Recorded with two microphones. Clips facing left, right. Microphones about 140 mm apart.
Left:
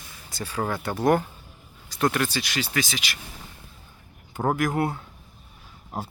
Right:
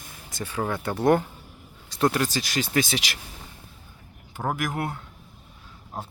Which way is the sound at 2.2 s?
40° right (ahead or behind).